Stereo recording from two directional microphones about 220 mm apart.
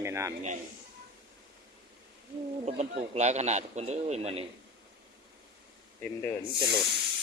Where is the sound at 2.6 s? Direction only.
30° right (ahead or behind).